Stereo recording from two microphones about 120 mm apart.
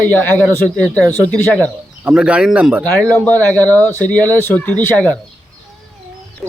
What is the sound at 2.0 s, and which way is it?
Speech, 10° right (ahead or behind).